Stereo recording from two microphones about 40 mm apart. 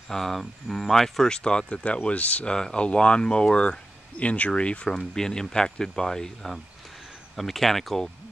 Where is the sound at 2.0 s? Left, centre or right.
Left.